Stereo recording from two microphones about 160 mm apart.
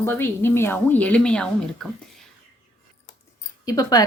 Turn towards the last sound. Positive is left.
turn(degrees=25)  # may be behind; listen again after turning